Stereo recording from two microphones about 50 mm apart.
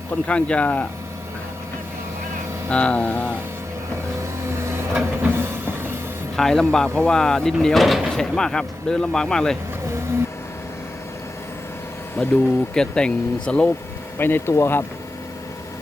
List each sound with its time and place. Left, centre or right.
0.3 s speech: left
2.6 s speech: left
4.9 s vehicle: right
6.3 s speech: centre
8.0 s speech: centre
12.1 s speech: left
12.7 s speech: centre
14.2 s speech: left
14.4 s speech: left